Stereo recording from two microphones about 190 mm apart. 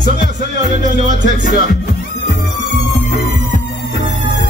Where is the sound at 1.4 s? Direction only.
45° left (ahead or behind).